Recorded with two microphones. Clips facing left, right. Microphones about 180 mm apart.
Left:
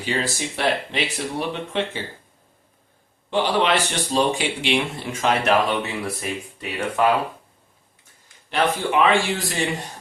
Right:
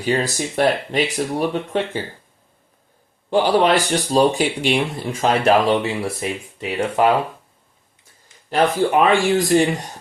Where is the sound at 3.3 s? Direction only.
40° right (ahead or behind).